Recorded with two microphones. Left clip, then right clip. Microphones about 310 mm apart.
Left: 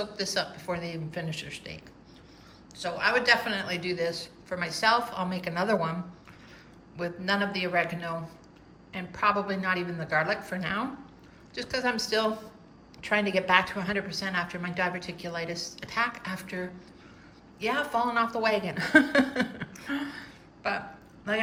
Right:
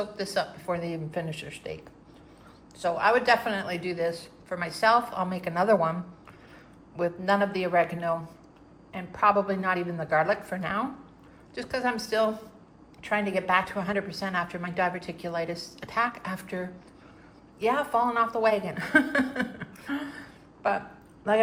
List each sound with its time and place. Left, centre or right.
0.0 s a woman's voice: centre